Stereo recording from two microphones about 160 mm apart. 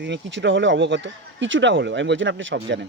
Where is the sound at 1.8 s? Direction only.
90° right.